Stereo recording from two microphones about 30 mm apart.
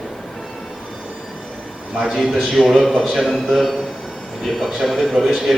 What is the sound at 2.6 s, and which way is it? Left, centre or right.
Speech, right.